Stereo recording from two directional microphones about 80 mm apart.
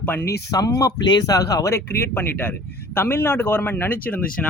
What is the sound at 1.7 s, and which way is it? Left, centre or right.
Speech, left.